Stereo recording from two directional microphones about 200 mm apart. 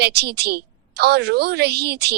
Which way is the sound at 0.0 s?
55° right (ahead or behind).